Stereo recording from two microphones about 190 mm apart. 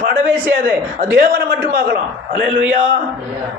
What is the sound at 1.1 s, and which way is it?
Speech, 50° right (ahead or behind).